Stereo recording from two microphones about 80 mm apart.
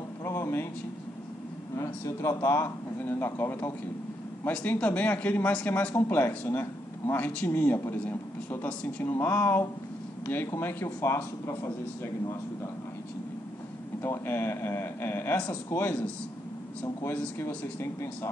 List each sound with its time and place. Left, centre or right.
0.2 s a sound: left
1.8 s speech: left
3.0 s a man's voice: left
4.5 s a man's voice: centre; by 12.4 s left
14.0 s speech: left